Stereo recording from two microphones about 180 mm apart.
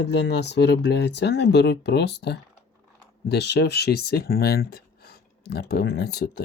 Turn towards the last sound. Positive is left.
turn(degrees=65)  # may be behind; listen again after turning